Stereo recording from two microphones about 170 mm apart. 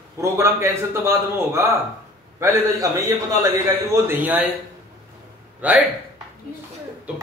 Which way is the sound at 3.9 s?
10° right (ahead or behind).